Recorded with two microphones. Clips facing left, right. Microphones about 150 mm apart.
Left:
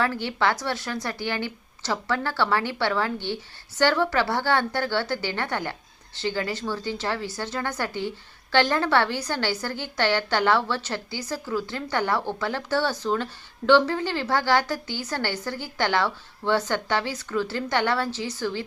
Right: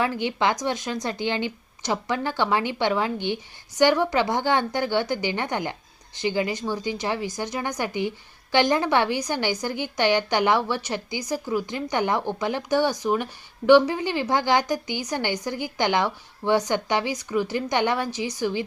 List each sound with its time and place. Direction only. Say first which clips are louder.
0.0 s a woman's voice: right 1 dB; 15° right (ahead or behind)